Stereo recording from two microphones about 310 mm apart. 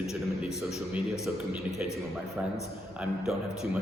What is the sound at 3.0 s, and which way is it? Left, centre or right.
Speech, centre.